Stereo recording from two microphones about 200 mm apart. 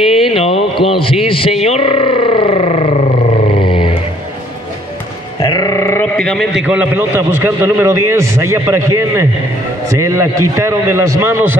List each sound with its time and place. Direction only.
0.1 s speech: 30° left (ahead or behind)
3.4 s vehicle: 25° left (ahead or behind)
5.4 s music: 20° left (ahead or behind)
6.1 s a man's voice: centre (ahead or behind)